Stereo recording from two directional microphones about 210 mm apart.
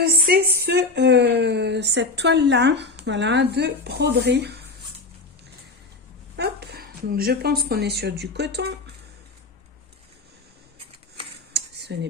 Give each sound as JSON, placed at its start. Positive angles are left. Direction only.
{"t": 0.0, "sound": "speech", "side_deg": -45}
{"t": 6.3, "sound": "a woman's voice", "side_deg": -50}
{"t": 11.5, "sound": "a sound", "side_deg": -55}